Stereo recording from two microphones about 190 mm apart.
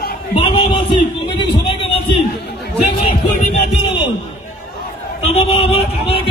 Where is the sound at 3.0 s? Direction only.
30° left (ahead or behind).